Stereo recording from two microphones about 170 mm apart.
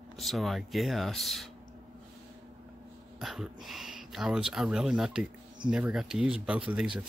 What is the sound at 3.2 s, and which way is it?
Speech, centre (ahead or behind).